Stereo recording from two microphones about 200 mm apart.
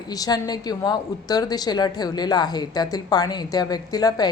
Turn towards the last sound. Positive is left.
turn(degrees=20)  # may be behind; listen again after turning